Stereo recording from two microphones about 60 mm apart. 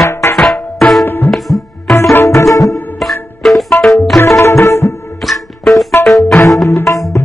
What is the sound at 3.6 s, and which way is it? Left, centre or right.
Music, left.